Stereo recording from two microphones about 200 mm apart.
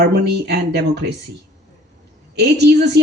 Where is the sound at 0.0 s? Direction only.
55° right (ahead or behind).